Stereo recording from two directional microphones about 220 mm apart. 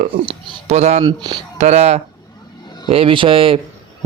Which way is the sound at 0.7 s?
30° right (ahead or behind).